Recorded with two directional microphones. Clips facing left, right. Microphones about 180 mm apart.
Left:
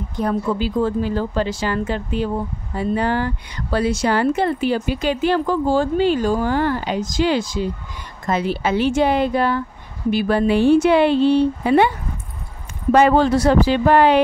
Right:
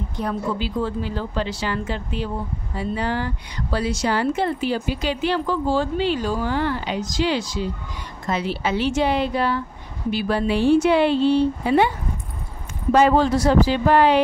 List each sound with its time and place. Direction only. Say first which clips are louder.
0.2 s speech: left 5 dB; 45° left (ahead or behind)
12.9 s speech: left 2 dB; 60° left (ahead or behind)